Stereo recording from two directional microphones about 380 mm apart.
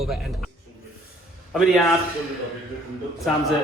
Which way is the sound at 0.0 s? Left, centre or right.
Centre.